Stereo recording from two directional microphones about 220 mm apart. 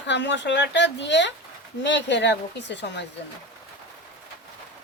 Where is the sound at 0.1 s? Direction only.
55° left (ahead or behind).